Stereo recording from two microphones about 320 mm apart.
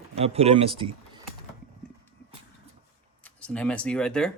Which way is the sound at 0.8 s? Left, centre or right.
Centre.